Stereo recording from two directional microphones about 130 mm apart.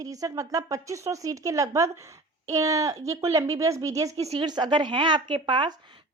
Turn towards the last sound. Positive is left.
turn(degrees=-35)  # may be behind; listen again after turning